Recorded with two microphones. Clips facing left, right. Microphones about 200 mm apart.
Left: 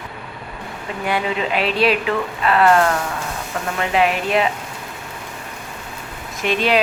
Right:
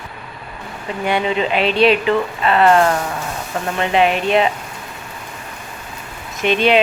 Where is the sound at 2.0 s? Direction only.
25° right (ahead or behind).